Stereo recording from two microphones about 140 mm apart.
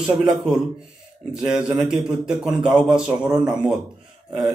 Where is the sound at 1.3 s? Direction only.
5° right (ahead or behind).